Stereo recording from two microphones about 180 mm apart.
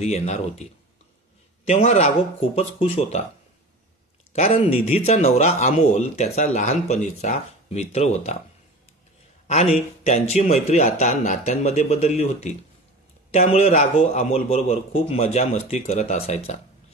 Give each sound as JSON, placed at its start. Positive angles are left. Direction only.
{"t": 0.0, "sound": "a man's voice", "side_deg": 35}
{"t": 1.7, "sound": "a man's voice", "side_deg": 40}
{"t": 4.3, "sound": "a man's voice", "side_deg": 35}
{"t": 9.5, "sound": "a man's voice", "side_deg": 40}